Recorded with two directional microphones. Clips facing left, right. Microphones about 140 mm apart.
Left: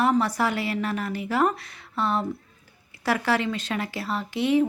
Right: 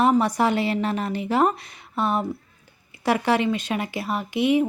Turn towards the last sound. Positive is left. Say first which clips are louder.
# right 1 dB
turn(degrees=-15)  # may be behind; listen again after turning